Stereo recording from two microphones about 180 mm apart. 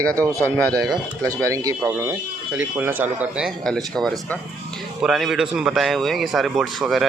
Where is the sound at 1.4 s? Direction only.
15° right (ahead or behind).